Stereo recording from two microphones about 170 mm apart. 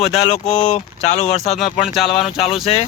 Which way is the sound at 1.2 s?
40° left (ahead or behind).